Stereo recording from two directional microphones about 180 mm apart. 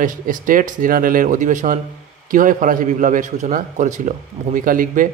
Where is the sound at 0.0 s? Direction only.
45° right (ahead or behind).